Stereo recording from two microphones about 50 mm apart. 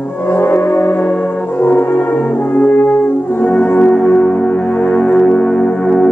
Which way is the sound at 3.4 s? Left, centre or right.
Left.